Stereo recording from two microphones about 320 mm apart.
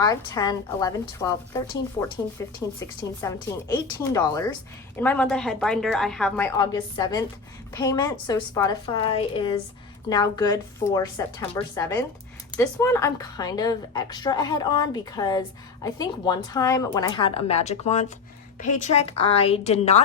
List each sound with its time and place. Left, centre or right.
0.0 s a woman's voice: centre